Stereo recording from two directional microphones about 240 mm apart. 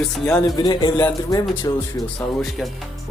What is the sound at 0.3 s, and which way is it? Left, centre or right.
Speech, centre.